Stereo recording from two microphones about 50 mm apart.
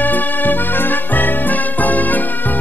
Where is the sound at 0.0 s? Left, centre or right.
Left.